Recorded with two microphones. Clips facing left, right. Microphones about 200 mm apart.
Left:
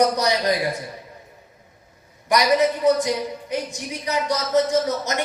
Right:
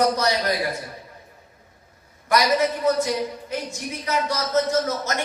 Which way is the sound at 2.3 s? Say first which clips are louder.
Left 2 dB; 15° left (ahead or behind).